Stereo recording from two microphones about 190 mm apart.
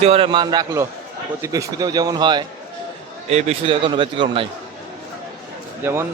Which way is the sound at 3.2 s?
35° right (ahead or behind).